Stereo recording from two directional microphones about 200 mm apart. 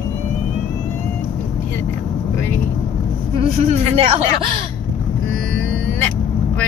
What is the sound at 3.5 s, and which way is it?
Speech, 30° right (ahead or behind).